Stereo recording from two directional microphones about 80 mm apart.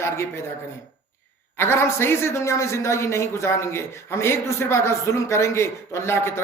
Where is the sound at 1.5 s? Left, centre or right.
Left.